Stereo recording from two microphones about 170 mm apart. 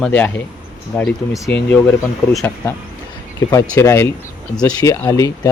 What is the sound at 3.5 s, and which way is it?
Speech, 15° left (ahead or behind).